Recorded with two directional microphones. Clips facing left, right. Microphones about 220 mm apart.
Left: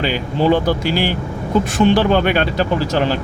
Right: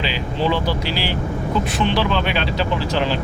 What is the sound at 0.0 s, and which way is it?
Speech, 50° left (ahead or behind).